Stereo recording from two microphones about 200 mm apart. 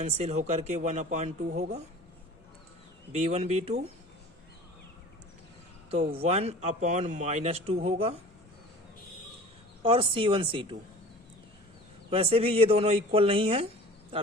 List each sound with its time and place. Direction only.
0.0 s a man's voice: 35° right (ahead or behind)
3.1 s a man's voice: 35° right (ahead or behind)
6.1 s a man's voice: 30° right (ahead or behind)
9.8 s speech: 25° right (ahead or behind)
12.1 s speech: 30° right (ahead or behind)